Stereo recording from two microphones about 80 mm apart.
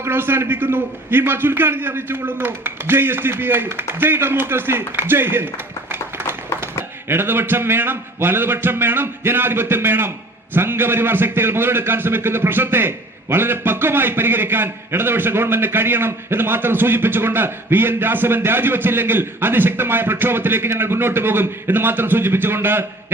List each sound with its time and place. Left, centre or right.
0.0 s a man's voice: right
5.9 s a sound: right
7.1 s a man's voice: right